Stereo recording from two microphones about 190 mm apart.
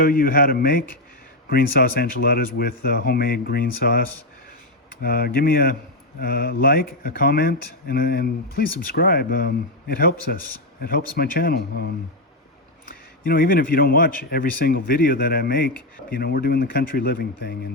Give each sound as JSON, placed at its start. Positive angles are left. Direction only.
{"t": 0.0, "sound": "speech", "side_deg": 50}
{"t": 5.0, "sound": "speech", "side_deg": 55}
{"t": 12.9, "sound": "speech", "side_deg": 50}